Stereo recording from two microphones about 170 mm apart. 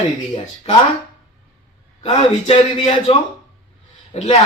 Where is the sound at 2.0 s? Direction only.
35° left (ahead or behind).